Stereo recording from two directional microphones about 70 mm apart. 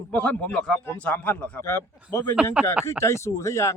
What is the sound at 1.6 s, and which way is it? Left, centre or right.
Speech, left.